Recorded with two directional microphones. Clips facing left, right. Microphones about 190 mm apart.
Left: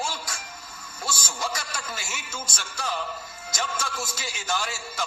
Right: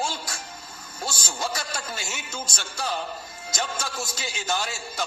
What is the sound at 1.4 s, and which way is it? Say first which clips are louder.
A man's voice: right 4 dB; 30° right (ahead or behind).